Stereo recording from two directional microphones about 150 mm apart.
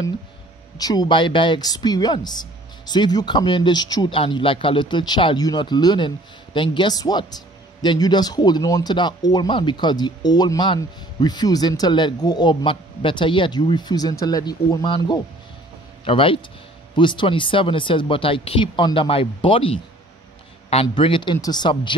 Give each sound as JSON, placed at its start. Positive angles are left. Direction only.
{"t": 0.7, "sound": "speech", "side_deg": 25}
{"t": 20.7, "sound": "speech", "side_deg": 35}